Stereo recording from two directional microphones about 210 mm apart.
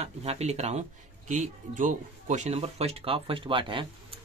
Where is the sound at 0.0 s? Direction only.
30° right (ahead or behind).